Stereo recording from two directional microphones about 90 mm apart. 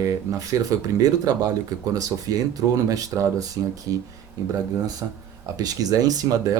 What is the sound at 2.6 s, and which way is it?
Speech, 40° right (ahead or behind).